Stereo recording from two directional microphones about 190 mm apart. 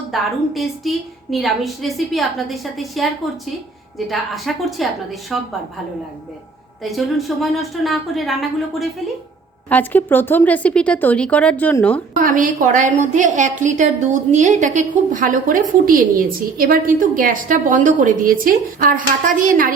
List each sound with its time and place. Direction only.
0.1 s a woman's voice: centre (ahead or behind)
6.8 s a woman's voice: centre (ahead or behind)
12.1 s a woman's voice: 45° right (ahead or behind)